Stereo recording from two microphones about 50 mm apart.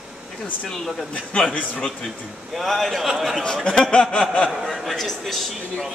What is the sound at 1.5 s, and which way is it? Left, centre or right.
Speech, left.